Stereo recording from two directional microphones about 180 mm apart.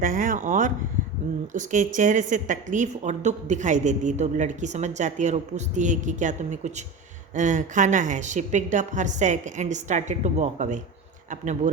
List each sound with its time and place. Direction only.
0.0 s a woman's voice: 50° right (ahead or behind)